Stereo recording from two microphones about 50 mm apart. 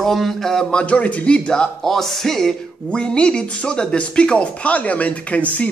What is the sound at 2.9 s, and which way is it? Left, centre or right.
Speech, centre.